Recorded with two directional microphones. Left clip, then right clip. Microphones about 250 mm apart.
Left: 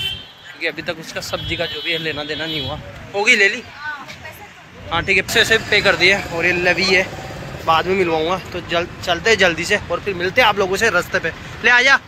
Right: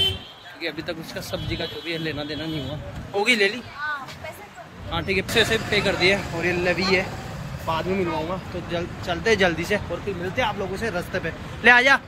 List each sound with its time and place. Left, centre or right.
0.6 s speech: centre
4.9 s speech: centre
10.2 s speech: left
10.8 s speech: centre